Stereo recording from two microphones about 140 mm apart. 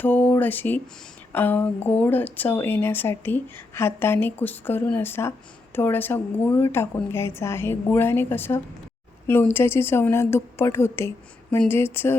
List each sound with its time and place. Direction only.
0.0 s speech: 10° left (ahead or behind)